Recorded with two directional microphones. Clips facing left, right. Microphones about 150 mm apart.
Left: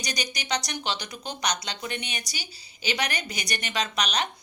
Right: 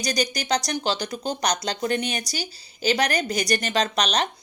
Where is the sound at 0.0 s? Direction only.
35° right (ahead or behind).